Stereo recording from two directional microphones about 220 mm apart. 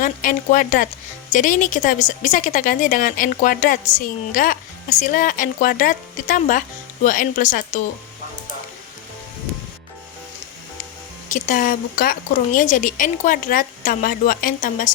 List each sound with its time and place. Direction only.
0.0 s a woman's voice: 40° left (ahead or behind)
11.3 s a woman's voice: 35° left (ahead or behind)